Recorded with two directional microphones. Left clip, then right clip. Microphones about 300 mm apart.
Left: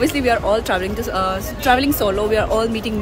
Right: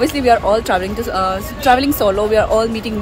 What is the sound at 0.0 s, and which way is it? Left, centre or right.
Speech, centre.